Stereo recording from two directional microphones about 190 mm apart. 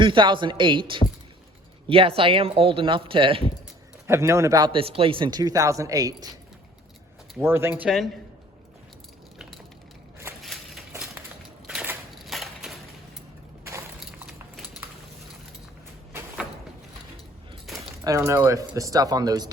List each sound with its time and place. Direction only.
0.0 s a man's voice: 25° right (ahead or behind)
4.0 s a man's voice: 15° right (ahead or behind)
7.3 s speech: 10° right (ahead or behind)
10.4 s crushing: centre (ahead or behind)
11.6 s a sound: centre (ahead or behind)
17.7 s a sound: centre (ahead or behind)
18.0 s speech: 15° right (ahead or behind)